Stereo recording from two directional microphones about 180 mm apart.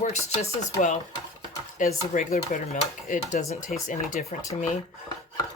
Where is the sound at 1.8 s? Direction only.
45° left (ahead or behind).